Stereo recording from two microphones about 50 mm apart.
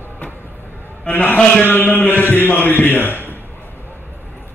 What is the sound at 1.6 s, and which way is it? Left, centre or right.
A man's voice, left.